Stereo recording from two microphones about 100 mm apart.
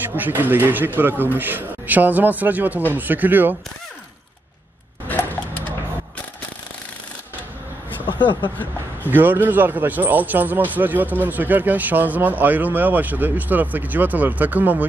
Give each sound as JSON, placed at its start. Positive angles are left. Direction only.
{"t": 0.1, "sound": "a man's voice", "side_deg": -20}
{"t": 5.0, "sound": "a sound", "side_deg": 20}
{"t": 9.1, "sound": "speech", "side_deg": -20}